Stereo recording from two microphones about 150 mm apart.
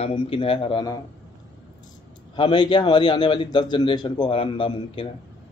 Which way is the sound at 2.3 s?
30° left (ahead or behind).